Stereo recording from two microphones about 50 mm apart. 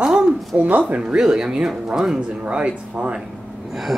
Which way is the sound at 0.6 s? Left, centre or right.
Right.